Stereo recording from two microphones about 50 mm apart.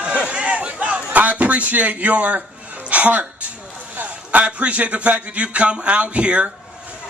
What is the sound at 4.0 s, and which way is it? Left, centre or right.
A man's voice, right.